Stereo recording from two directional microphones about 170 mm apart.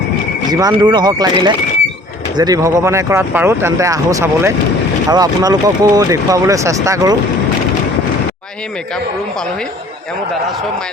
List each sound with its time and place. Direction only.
0.5 s speech: 25° right (ahead or behind)